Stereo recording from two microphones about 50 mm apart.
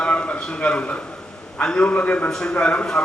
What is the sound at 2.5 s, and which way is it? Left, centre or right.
Speech, left.